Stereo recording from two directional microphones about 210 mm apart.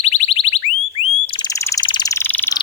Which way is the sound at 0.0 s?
30° left (ahead or behind).